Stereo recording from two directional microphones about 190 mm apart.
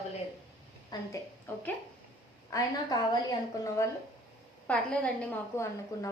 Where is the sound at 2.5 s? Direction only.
20° left (ahead or behind).